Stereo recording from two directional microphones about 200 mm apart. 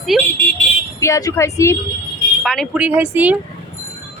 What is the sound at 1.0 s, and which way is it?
Speech, 15° left (ahead or behind).